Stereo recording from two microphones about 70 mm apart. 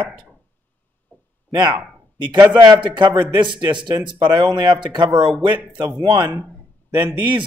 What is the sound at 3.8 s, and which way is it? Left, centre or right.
Speech, right.